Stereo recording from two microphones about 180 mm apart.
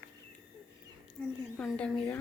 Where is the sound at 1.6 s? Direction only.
5° left (ahead or behind).